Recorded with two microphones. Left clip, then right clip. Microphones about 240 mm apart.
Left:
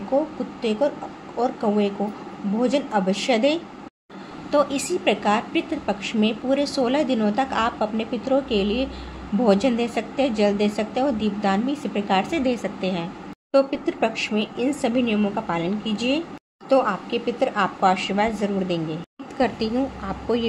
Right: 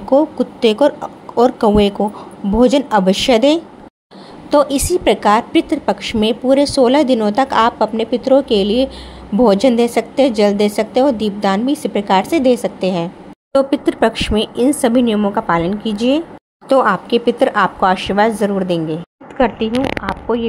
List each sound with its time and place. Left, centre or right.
0.1 s a woman's voice: right
19.3 s speech: centre